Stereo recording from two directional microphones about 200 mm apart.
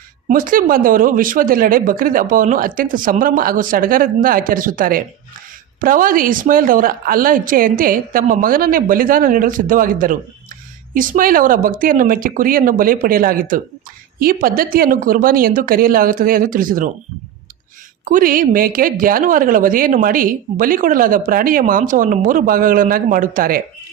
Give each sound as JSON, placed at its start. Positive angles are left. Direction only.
{"t": 0.3, "sound": "a woman's voice", "side_deg": -45}
{"t": 18.0, "sound": "a woman's voice", "side_deg": -45}